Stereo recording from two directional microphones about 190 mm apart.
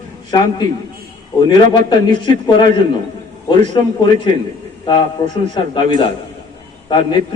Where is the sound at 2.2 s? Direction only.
25° left (ahead or behind).